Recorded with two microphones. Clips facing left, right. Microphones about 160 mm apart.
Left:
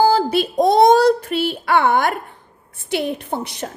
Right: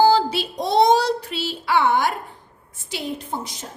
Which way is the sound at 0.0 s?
50° left (ahead or behind).